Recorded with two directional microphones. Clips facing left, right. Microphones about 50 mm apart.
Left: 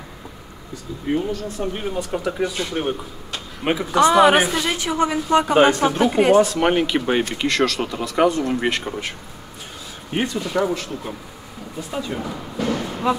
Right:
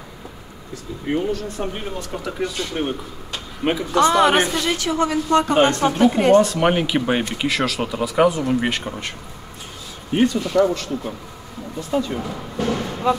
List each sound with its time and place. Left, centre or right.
1.7 s a woman's voice: centre
4.7 s a woman's voice: centre
10.1 s a woman's voice: centre